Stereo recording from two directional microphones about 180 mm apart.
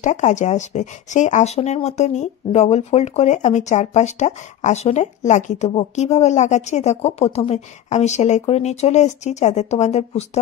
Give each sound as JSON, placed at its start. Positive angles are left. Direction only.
{"t": 0.0, "sound": "speech", "side_deg": 40}